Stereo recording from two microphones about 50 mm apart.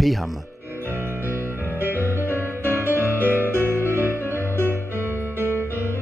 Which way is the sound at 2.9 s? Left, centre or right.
Right.